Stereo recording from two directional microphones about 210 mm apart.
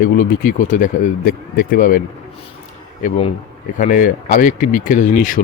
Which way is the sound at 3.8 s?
40° left (ahead or behind).